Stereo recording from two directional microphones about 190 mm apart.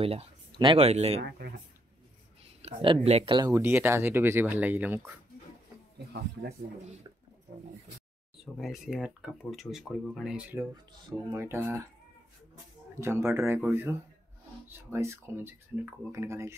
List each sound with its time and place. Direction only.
0.0 s speech: 30° right (ahead or behind)
2.4 s speech: 30° right (ahead or behind)
3.5 s speech: 10° right (ahead or behind)
8.5 s speech: centre (ahead or behind)
12.9 s speech: 15° right (ahead or behind)
14.7 s speech: 15° right (ahead or behind)